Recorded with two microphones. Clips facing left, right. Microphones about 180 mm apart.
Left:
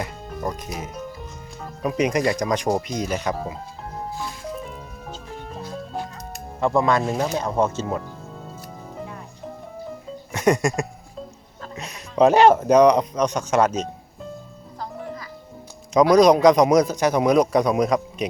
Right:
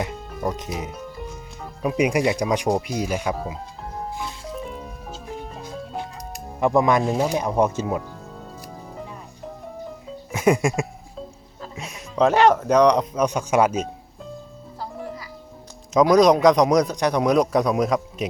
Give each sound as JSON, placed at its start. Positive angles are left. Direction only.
{"t": 0.3, "sound": "music", "side_deg": 0}
{"t": 0.5, "sound": "speech", "side_deg": -20}
{"t": 0.9, "sound": "music", "side_deg": -5}
{"t": 2.6, "sound": "speech", "side_deg": -5}
{"t": 4.6, "sound": "music", "side_deg": 0}
{"t": 5.6, "sound": "music", "side_deg": -15}
{"t": 7.2, "sound": "speech", "side_deg": -15}
{"t": 10.3, "sound": "music", "side_deg": -5}
{"t": 12.2, "sound": "speech", "side_deg": 10}
{"t": 12.8, "sound": "a man's voice", "side_deg": 5}
{"t": 13.1, "sound": "speech", "side_deg": -10}
{"t": 14.8, "sound": "music", "side_deg": -5}
{"t": 15.9, "sound": "a man's voice", "side_deg": 0}